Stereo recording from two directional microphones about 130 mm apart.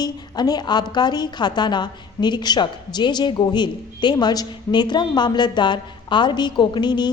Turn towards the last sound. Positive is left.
turn(degrees=35)  # may be behind; listen again after turning